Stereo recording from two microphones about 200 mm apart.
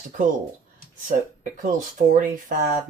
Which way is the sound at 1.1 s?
40° right (ahead or behind).